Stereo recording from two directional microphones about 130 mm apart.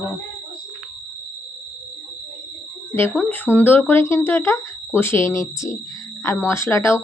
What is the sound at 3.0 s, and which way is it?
Speech, 15° left (ahead or behind).